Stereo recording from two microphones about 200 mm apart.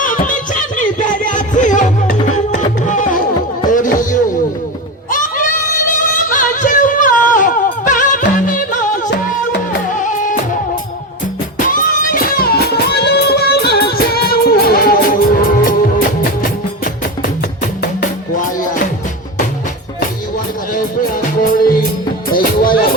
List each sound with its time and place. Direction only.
0.0 s music: 40° left (ahead or behind)
5.9 s music: 40° left (ahead or behind)
9.9 s music: 40° left (ahead or behind)
11.6 s music: 45° left (ahead or behind)
20.7 s music: 45° left (ahead or behind)